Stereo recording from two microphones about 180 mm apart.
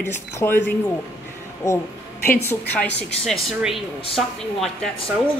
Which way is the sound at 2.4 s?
10° left (ahead or behind).